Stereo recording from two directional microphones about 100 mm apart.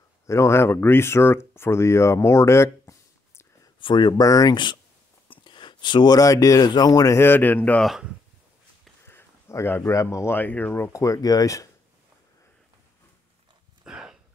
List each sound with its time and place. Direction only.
0.3 s speech: 25° left (ahead or behind)
3.8 s speech: 50° left (ahead or behind)
4.2 s speech: 40° left (ahead or behind)
5.3 s a sound: 50° left (ahead or behind)
6.1 s speech: 35° left (ahead or behind)
7.2 s a man's voice: 20° left (ahead or behind)
7.8 s speech: 5° right (ahead or behind)
9.0 s speech: 25° left (ahead or behind)
13.8 s a sound: 5° right (ahead or behind)